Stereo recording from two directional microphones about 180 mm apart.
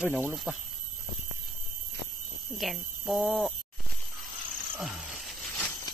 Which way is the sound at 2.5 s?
Centre (ahead or behind).